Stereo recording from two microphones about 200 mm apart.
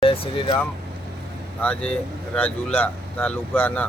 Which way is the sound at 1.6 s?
5° left (ahead or behind).